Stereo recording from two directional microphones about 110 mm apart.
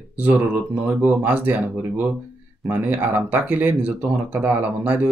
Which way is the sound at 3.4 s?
15° right (ahead or behind).